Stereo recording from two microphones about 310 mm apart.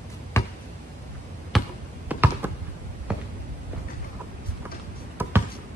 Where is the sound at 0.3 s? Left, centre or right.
Centre.